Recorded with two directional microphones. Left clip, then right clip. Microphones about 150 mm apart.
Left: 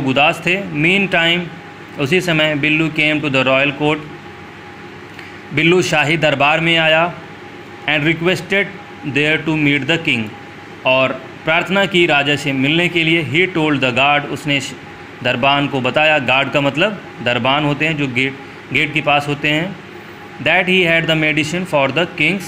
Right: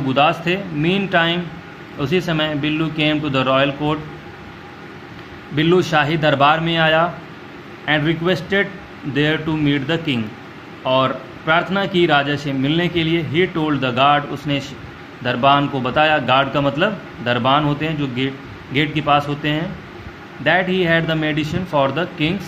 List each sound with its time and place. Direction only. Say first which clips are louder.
0.0 s a man's voice: left 2 dB; 20° left (ahead or behind)
5.6 s a man's voice: left 2 dB; 20° left (ahead or behind)
20.7 s a man's voice: left 4 dB; 20° left (ahead or behind)